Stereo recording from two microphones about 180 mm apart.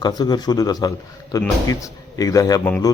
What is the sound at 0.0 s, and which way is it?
A man's voice, 20° left (ahead or behind).